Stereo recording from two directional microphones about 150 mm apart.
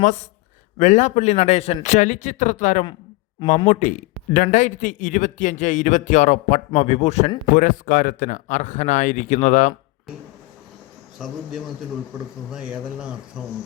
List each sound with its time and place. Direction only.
0.0 s a man's voice: 55° left (ahead or behind)
11.2 s a man's voice: centre (ahead or behind)